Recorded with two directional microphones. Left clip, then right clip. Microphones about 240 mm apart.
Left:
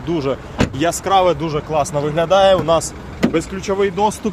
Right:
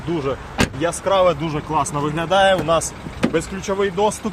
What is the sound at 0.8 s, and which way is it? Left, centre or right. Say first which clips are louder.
Speech: left 3 dB; centre.